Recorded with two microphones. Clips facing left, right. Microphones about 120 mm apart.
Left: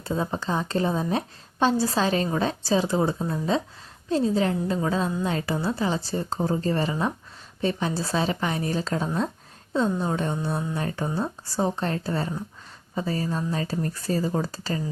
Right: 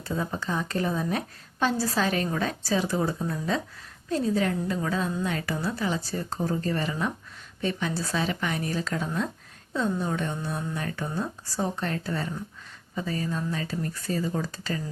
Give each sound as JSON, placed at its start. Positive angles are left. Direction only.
{"t": 0.0, "sound": "a woman's voice", "side_deg": 25}